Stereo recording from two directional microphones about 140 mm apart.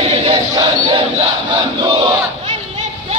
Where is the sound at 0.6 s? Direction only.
30° right (ahead or behind).